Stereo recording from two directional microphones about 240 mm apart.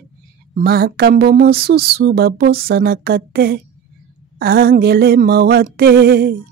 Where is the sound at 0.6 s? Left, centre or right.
Right.